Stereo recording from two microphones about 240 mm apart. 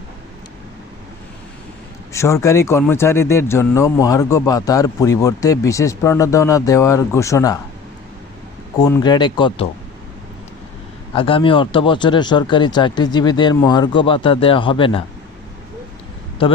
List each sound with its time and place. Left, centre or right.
2.1 s speech: centre
8.8 s speech: centre
11.1 s speech: left
16.4 s speech: left